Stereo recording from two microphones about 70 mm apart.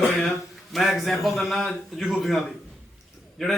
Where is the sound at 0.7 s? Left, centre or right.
Centre.